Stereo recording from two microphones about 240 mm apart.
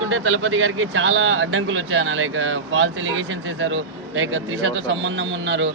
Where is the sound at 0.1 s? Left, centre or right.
Right.